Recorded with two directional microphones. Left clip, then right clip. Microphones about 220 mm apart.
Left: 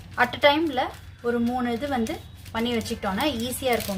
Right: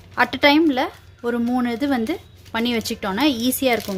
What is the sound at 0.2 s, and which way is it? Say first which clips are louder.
A woman's voice: right 4 dB; 45° right (ahead or behind).